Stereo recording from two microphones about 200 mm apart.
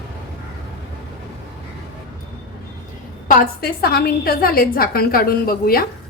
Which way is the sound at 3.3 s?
50° left (ahead or behind).